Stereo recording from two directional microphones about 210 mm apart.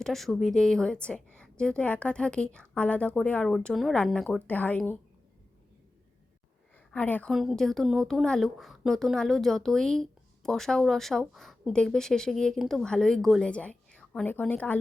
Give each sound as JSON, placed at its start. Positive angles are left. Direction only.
{"t": 0.0, "sound": "speech", "side_deg": 0}
{"t": 6.9, "sound": "speech", "side_deg": 5}